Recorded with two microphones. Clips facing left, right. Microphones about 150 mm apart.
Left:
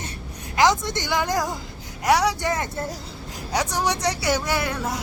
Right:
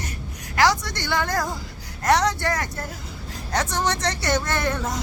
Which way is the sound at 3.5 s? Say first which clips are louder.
Even; 10° left (ahead or behind).